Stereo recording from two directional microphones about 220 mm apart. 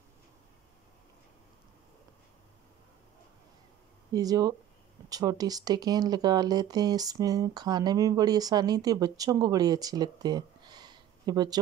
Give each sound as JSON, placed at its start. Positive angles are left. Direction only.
{"t": 4.1, "sound": "speech", "side_deg": -15}